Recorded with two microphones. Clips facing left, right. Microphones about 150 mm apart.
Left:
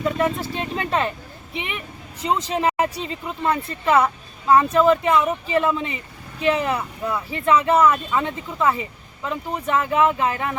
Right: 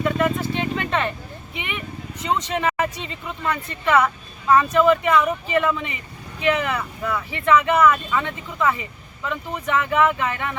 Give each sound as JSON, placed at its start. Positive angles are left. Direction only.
{"t": 0.0, "sound": "vehicle", "side_deg": 35}
{"t": 2.1, "sound": "speech", "side_deg": 35}